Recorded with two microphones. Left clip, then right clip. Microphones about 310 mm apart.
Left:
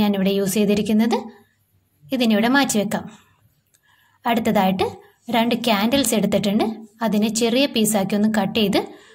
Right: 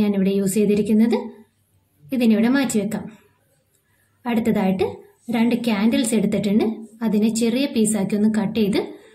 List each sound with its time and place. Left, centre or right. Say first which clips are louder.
0.0 s a woman's voice: left 1 dB; left
4.2 s a woman's voice: left 4 dB; left